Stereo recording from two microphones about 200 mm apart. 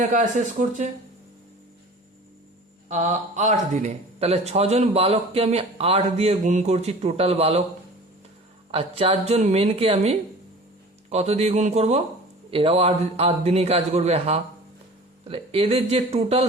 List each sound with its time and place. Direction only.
0.1 s speech: 40° right (ahead or behind)
2.9 s speech: 35° right (ahead or behind)
8.7 s a man's voice: 30° right (ahead or behind)